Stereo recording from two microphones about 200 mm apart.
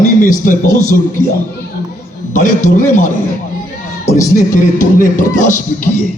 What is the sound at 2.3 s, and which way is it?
Speech, 40° left (ahead or behind).